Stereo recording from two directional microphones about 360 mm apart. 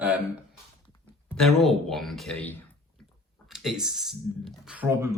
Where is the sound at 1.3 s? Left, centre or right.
Centre.